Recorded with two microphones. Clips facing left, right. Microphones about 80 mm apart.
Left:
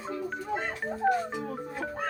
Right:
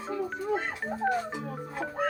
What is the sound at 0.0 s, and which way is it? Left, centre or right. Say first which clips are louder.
Speech: right 2 dB; centre.